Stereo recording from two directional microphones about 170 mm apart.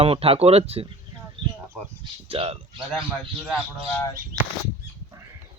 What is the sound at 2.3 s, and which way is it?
Speech, 35° right (ahead or behind).